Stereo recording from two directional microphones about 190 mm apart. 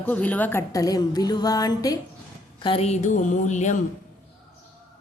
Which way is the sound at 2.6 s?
30° left (ahead or behind).